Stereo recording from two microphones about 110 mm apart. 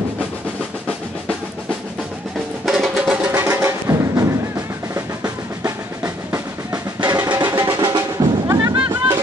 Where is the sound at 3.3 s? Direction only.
20° right (ahead or behind).